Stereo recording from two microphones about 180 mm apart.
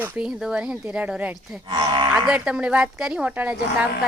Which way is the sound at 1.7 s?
25° right (ahead or behind).